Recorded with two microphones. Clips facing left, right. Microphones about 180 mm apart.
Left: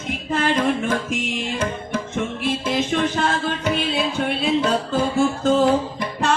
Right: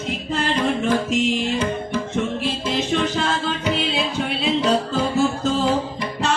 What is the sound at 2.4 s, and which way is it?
Music, 55° left (ahead or behind).